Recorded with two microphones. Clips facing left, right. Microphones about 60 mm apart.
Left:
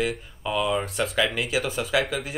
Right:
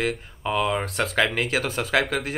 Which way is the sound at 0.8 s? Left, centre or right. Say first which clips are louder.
Right 2 dB; right.